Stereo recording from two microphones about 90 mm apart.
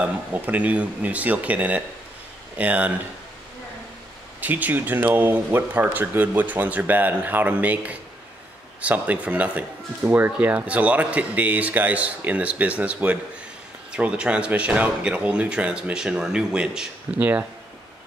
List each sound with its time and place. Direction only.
0.0 s speech: 15° right (ahead or behind)
4.4 s speech: 20° right (ahead or behind)